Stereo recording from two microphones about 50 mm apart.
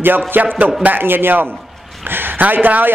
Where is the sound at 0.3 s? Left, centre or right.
Right.